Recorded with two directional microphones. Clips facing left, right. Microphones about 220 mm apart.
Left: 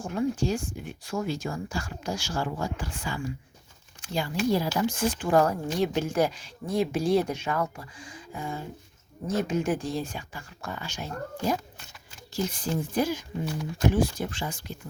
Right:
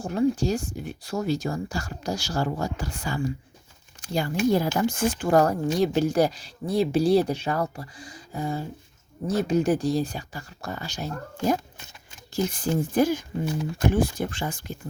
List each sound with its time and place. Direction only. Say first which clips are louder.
0.0 s speech: right 4 dB; 35° right (ahead or behind)
12.3 s speech: right 4 dB; 50° right (ahead or behind)